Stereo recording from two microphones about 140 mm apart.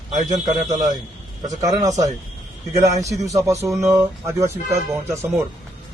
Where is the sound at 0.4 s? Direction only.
25° right (ahead or behind).